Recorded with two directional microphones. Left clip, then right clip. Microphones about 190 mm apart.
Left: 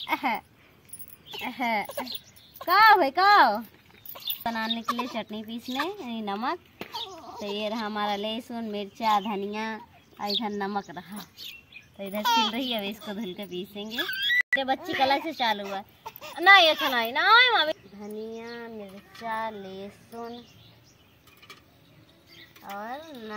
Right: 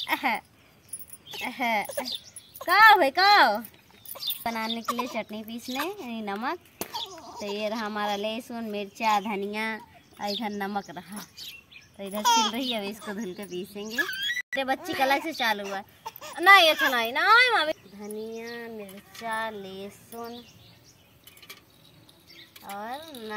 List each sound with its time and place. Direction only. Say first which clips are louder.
0.0 s speech: right 1 dB; 5° right (ahead or behind)
1.4 s a woman's voice: right 1 dB; centre (ahead or behind)
6.9 s a sound: left 1 dB; 10° right (ahead or behind)
7.6 s a woman's voice: even; centre (ahead or behind); by 11.1 s 25° right (ahead or behind)
12.0 s a child's voice: right 1 dB; centre (ahead or behind)
13.2 s a woman's voice: even; 20° left (ahead or behind)
14.6 s a woman's voice: left 1 dB; centre (ahead or behind)
16.0 s a sound: right 1 dB; 10° right (ahead or behind)
16.3 s a woman's voice: even; centre (ahead or behind)
22.6 s a woman's voice: even; 10° right (ahead or behind)